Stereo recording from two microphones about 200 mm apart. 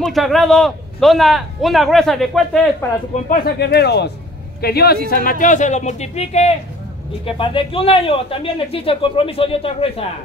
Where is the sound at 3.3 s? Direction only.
55° left (ahead or behind).